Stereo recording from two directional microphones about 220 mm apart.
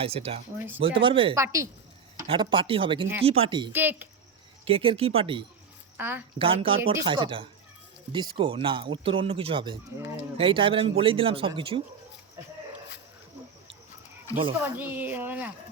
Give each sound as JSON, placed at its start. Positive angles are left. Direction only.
{"t": 0.0, "sound": "speech", "side_deg": -25}
{"t": 1.4, "sound": "speech", "side_deg": -10}
{"t": 2.2, "sound": "speech", "side_deg": -25}
{"t": 3.7, "sound": "speech", "side_deg": -10}
{"t": 4.6, "sound": "speech", "side_deg": -25}
{"t": 6.0, "sound": "speech", "side_deg": -10}
{"t": 6.4, "sound": "speech", "side_deg": -25}
{"t": 14.6, "sound": "speech", "side_deg": -10}